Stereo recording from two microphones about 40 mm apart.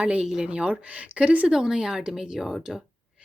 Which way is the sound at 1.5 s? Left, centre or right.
Centre.